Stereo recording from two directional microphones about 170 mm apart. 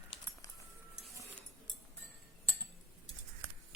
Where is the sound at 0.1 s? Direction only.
30° left (ahead or behind).